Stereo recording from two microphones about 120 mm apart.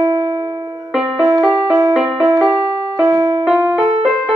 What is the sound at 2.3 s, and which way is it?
Music, 30° right (ahead or behind).